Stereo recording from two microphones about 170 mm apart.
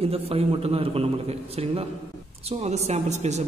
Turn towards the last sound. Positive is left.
turn(degrees=-40)  # may be behind; listen again after turning